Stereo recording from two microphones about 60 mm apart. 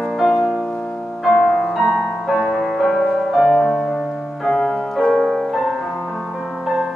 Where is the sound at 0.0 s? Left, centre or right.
Centre.